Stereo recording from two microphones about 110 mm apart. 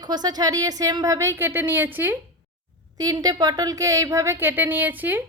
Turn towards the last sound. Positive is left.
turn(degrees=-15)  # may be behind; listen again after turning